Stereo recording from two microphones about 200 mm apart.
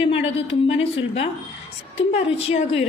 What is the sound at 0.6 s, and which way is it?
Speech, 30° left (ahead or behind).